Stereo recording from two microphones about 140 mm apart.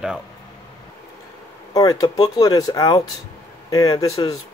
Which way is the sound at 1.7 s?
25° left (ahead or behind).